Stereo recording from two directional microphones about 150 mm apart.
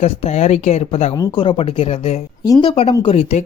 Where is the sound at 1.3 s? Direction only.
35° left (ahead or behind).